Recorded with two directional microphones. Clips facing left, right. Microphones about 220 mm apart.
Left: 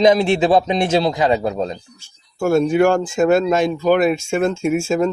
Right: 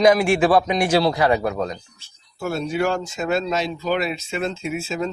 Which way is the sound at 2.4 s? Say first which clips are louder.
Left 8 dB; 50° left (ahead or behind).